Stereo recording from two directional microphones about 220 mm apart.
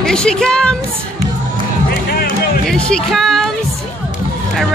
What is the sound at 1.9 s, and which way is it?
Music, 45° left (ahead or behind).